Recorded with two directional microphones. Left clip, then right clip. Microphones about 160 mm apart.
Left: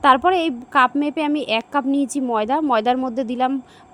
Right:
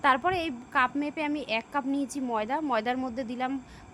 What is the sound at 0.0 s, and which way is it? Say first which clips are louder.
Speech: left 10 dB; 35° left (ahead or behind).